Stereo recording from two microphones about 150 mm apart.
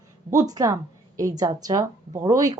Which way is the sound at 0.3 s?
25° right (ahead or behind).